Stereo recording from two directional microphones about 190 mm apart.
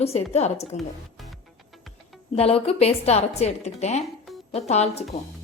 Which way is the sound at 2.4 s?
30° left (ahead or behind).